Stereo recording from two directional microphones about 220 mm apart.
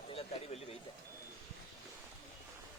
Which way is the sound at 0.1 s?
25° left (ahead or behind).